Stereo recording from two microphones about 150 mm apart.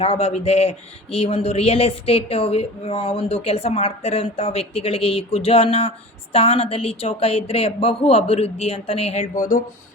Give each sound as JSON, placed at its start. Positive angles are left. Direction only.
{"t": 0.0, "sound": "speech", "side_deg": 40}
{"t": 9.3, "sound": "speech", "side_deg": 65}